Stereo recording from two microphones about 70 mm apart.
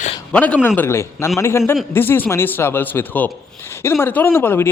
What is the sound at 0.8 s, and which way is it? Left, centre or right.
Speech, left.